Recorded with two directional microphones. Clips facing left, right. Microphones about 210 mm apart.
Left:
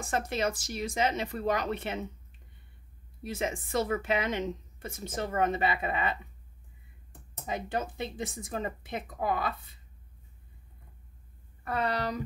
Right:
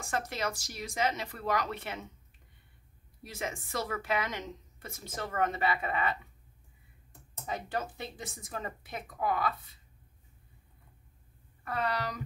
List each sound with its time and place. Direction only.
0.1 s speech: 20° left (ahead or behind)
3.3 s speech: 25° left (ahead or behind)
7.4 s speech: 20° left (ahead or behind)
11.6 s speech: 25° left (ahead or behind)